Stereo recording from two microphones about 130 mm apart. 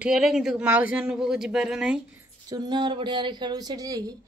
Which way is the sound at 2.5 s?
35° right (ahead or behind).